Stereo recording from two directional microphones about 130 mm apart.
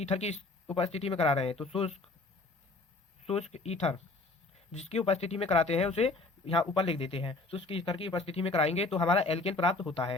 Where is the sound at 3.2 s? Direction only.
55° left (ahead or behind).